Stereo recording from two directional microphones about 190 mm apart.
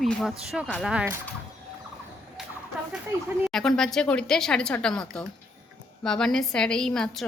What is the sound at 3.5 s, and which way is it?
Speech, centre (ahead or behind).